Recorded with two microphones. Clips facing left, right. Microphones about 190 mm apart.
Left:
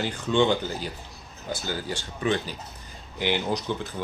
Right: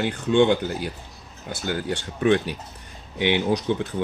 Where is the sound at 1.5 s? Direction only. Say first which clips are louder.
Right 4 dB; 60° right (ahead or behind).